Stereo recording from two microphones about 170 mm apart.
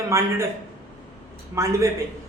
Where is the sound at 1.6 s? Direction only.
20° right (ahead or behind).